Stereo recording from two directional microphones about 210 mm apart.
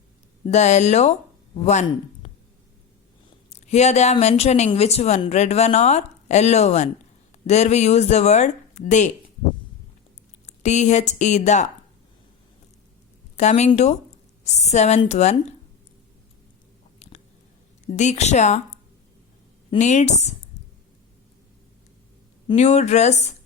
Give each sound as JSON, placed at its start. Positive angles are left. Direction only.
{"t": 0.4, "sound": "a woman's voice", "side_deg": 35}
{"t": 3.5, "sound": "a woman's voice", "side_deg": 30}
{"t": 10.4, "sound": "a woman's voice", "side_deg": 35}
{"t": 13.3, "sound": "a woman's voice", "side_deg": 35}
{"t": 17.0, "sound": "biting", "side_deg": 30}
{"t": 17.9, "sound": "a woman's voice", "side_deg": 35}
{"t": 19.8, "sound": "a woman's voice", "side_deg": 35}
{"t": 22.5, "sound": "a woman's voice", "side_deg": 35}